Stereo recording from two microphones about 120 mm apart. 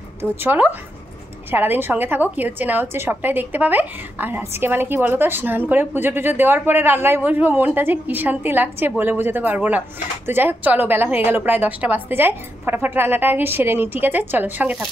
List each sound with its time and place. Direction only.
0.2 s a woman's voice: 15° right (ahead or behind)